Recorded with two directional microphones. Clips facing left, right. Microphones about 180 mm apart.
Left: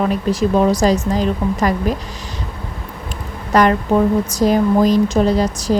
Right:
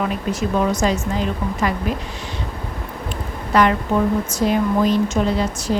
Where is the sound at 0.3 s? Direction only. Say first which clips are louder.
Left 5 dB; 35° left (ahead or behind).